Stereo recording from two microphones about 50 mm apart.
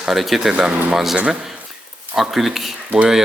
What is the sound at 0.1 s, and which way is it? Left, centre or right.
Speech, centre.